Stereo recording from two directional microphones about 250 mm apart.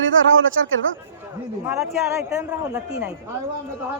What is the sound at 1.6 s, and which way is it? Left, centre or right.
A man's voice, centre.